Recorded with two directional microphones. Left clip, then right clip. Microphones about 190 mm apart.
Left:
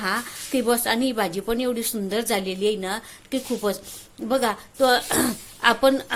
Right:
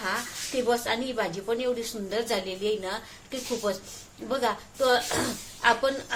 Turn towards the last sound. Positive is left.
turn(degrees=55)  # may be behind; listen again after turning